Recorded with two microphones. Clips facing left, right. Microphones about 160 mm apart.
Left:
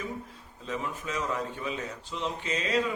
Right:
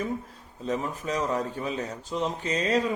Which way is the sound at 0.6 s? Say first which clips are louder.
Right 5 dB; 40° right (ahead or behind).